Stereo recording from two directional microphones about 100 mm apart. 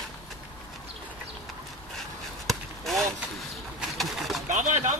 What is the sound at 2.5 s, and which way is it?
Basketball bounce, centre (ahead or behind).